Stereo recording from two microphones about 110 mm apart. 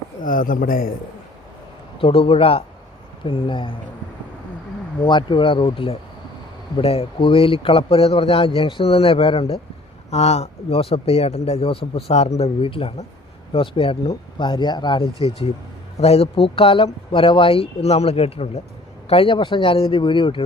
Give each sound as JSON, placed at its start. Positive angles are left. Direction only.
{"t": 2.0, "sound": "a man's voice", "side_deg": 55}
{"t": 5.0, "sound": "speech", "side_deg": 45}
{"t": 6.7, "sound": "a man's voice", "side_deg": 65}
{"t": 10.1, "sound": "a man's voice", "side_deg": 75}
{"t": 14.3, "sound": "a man's voice", "side_deg": 45}